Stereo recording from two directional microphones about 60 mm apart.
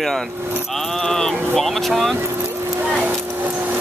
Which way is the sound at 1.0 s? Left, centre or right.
Centre.